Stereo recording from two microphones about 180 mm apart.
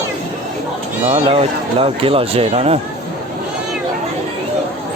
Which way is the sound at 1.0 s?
35° right (ahead or behind).